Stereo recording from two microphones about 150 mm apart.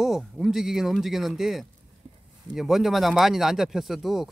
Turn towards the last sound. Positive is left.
turn(degrees=0)  # may be behind; listen again after turning